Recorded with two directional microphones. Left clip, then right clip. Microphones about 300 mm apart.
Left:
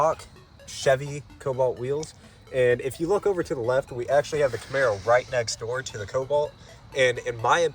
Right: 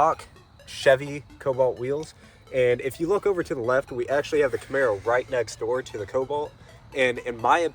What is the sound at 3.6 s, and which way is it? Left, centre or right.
Speech, centre.